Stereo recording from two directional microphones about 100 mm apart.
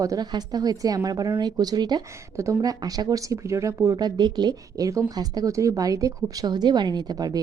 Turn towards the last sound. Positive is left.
turn(degrees=-40)  # may be behind; listen again after turning